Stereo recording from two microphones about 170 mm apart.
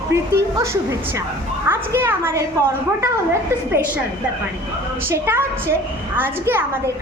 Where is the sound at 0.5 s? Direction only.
15° right (ahead or behind).